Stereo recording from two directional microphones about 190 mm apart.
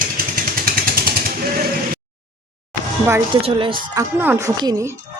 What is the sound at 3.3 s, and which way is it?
Speech, 25° right (ahead or behind).